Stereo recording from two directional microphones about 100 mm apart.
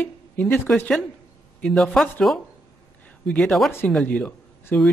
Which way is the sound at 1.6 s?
Centre (ahead or behind).